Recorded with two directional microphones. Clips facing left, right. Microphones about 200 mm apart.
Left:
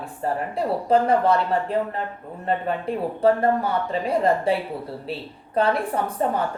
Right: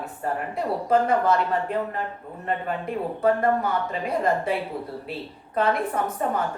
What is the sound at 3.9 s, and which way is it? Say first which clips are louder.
Speech: left 5 dB; 30° left (ahead or behind).